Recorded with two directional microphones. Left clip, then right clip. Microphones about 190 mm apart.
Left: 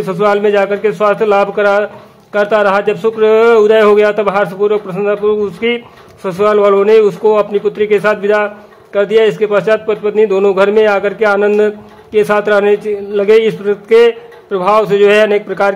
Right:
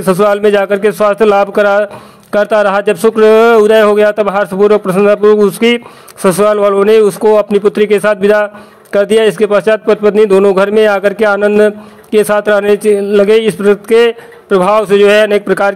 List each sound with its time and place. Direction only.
0.0 s speech: 35° right (ahead or behind)